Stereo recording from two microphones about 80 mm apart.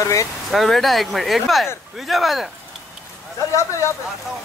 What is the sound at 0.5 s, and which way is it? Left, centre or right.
Speech, centre.